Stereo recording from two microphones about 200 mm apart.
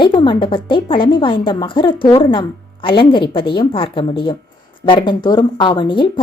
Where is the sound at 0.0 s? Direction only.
25° left (ahead or behind).